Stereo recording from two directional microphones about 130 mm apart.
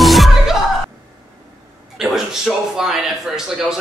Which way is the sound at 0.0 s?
Centre (ahead or behind).